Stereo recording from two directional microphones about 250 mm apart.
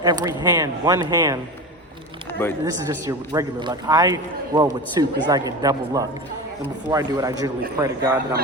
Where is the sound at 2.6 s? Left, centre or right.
Centre.